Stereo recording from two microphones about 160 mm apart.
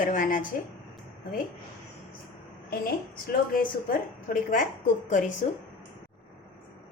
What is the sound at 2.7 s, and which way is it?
A woman's voice, 70° left (ahead or behind).